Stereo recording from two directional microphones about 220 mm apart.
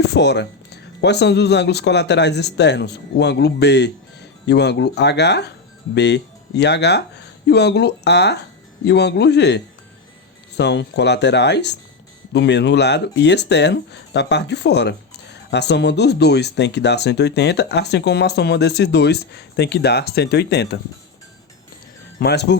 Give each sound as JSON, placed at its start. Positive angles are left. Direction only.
{"t": 0.1, "sound": "speech", "side_deg": 50}
{"t": 22.2, "sound": "speech", "side_deg": 50}